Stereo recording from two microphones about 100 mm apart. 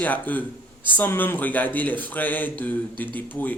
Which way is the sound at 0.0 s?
15° left (ahead or behind).